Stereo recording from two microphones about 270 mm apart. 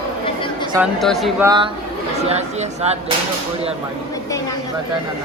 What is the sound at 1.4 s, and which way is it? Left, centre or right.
Speech, centre.